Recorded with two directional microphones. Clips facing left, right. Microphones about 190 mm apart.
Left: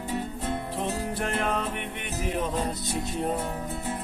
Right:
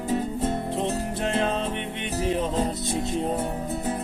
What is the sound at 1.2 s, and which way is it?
Music, 25° right (ahead or behind).